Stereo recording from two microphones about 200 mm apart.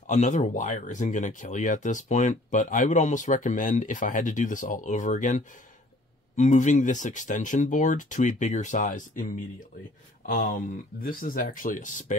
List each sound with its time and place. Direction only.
0.0 s speech: 40° left (ahead or behind)